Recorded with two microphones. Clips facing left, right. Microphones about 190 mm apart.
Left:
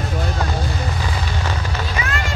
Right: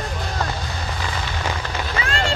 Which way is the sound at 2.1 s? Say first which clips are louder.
Right 3 dB; 30° right (ahead or behind).